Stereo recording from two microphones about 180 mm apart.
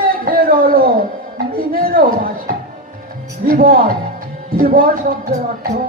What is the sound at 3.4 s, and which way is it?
Speech, 50° right (ahead or behind).